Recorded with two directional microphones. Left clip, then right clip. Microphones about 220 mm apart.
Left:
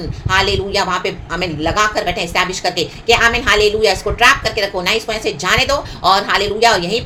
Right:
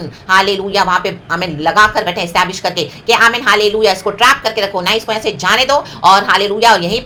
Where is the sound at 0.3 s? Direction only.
20° right (ahead or behind).